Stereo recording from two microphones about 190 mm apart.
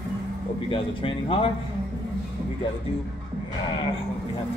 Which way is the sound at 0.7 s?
25° left (ahead or behind).